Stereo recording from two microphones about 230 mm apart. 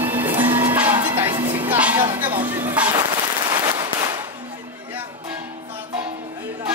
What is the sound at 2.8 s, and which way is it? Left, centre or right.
Firecracker, centre.